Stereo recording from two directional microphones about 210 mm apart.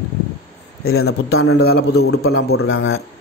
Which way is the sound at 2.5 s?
75° left (ahead or behind).